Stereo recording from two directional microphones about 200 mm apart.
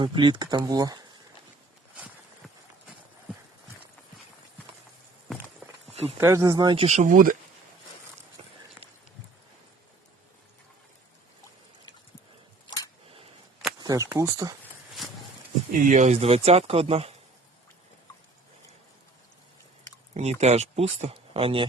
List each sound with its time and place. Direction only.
0.0 s speech: 25° right (ahead or behind)
5.9 s a sound: 30° right (ahead or behind)
6.1 s speech: 15° right (ahead or behind)
6.8 s speech: 35° right (ahead or behind)
8.4 s run: 30° right (ahead or behind)
12.6 s a sound: 20° left (ahead or behind)
13.7 s speech: 20° right (ahead or behind)
15.7 s speech: 40° right (ahead or behind)
20.1 s speech: 35° right (ahead or behind)